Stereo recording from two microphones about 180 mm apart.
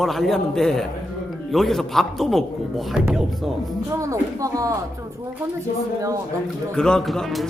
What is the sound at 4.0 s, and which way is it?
Speech, 15° right (ahead or behind).